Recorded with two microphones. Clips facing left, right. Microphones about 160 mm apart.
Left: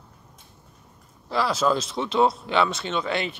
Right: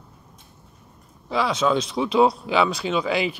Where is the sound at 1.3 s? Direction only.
Centre (ahead or behind).